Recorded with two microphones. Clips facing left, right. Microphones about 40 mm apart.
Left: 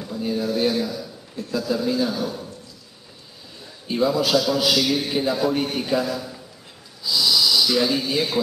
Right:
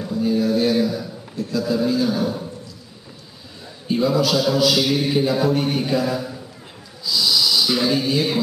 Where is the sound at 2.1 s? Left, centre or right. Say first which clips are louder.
Right 4 dB; centre.